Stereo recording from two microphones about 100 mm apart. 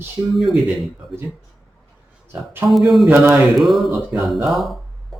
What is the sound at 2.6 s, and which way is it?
Speech, centre (ahead or behind).